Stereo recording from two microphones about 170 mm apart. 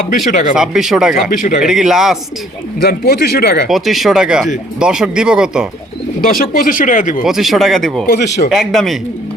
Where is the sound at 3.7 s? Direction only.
Centre (ahead or behind).